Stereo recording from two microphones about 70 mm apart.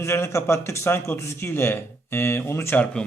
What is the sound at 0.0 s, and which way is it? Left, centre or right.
Speech, left.